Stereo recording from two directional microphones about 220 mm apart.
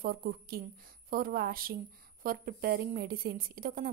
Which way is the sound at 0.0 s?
40° right (ahead or behind).